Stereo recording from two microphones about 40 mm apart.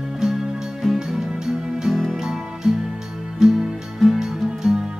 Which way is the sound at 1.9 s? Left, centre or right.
Centre.